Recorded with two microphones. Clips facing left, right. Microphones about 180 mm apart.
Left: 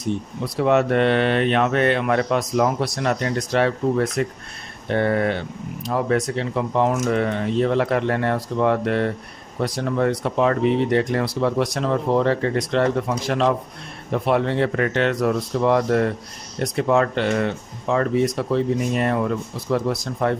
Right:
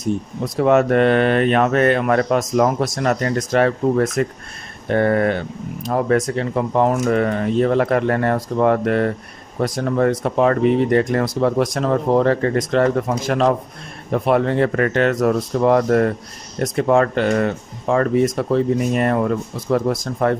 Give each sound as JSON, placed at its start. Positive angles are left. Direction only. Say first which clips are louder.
{"t": 0.0, "sound": "speech", "louder": "right 3 dB", "side_deg": -45}